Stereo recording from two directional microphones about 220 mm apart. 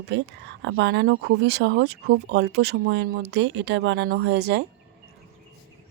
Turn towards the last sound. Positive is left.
turn(degrees=-50)  # may be behind; listen again after turning